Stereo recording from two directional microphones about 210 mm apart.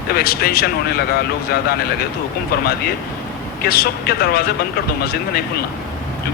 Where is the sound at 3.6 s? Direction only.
45° left (ahead or behind).